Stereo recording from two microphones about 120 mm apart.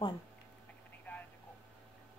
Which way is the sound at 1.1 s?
15° left (ahead or behind).